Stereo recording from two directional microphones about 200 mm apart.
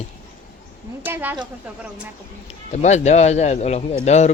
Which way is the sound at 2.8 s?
35° left (ahead or behind).